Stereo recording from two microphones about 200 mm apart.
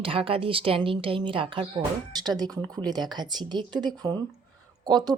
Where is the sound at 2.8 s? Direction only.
20° right (ahead or behind).